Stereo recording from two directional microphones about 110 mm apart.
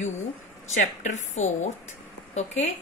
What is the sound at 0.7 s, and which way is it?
A woman's voice, 90° left.